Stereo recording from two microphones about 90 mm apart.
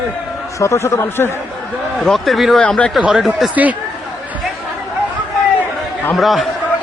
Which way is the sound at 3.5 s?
15° right (ahead or behind).